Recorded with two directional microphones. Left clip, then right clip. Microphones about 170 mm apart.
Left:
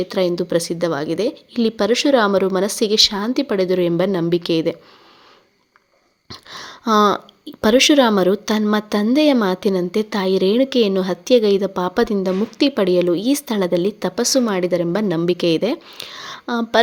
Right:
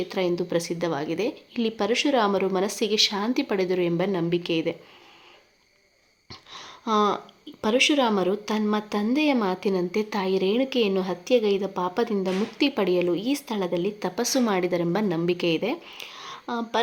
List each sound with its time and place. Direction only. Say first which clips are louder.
0.0 s speech: left 7 dB; 25° left (ahead or behind)
6.2 s speech: left 8 dB; 30° left (ahead or behind)